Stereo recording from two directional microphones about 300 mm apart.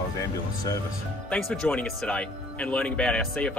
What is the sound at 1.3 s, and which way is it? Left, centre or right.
Speech, centre.